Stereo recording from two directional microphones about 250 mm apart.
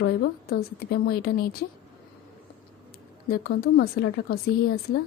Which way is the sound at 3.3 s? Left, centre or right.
Left.